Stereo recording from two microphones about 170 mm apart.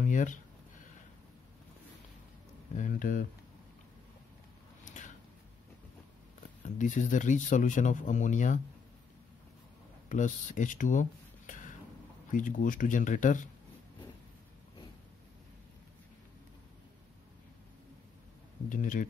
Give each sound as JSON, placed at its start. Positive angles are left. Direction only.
{"t": 0.0, "sound": "a sound", "side_deg": 50}
{"t": 2.7, "sound": "speech", "side_deg": 50}
{"t": 4.8, "sound": "a sound", "side_deg": 45}
{"t": 6.6, "sound": "speech", "side_deg": 45}
{"t": 10.0, "sound": "speech", "side_deg": 50}
{"t": 18.7, "sound": "speech", "side_deg": 50}